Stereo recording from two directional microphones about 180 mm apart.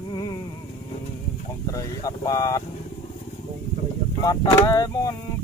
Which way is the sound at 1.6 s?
20° left (ahead or behind).